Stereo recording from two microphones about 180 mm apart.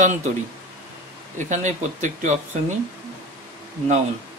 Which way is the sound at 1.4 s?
40° right (ahead or behind).